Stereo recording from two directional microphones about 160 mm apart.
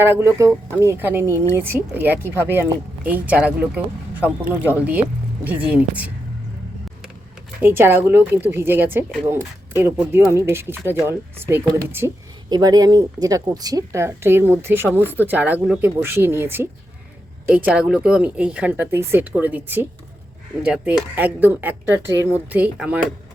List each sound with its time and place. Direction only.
0.0 s speech: 15° right (ahead or behind)
7.6 s speech: 15° right (ahead or behind)
12.5 s a woman's voice: 25° right (ahead or behind); by 23.1 s 5° right (ahead or behind)